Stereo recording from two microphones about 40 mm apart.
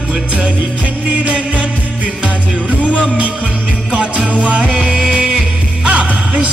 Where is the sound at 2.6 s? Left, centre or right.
Right.